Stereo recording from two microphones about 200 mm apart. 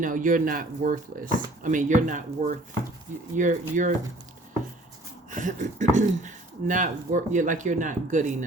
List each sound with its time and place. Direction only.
0.0 s speech: 40° right (ahead or behind)
5.3 s speech: 40° right (ahead or behind)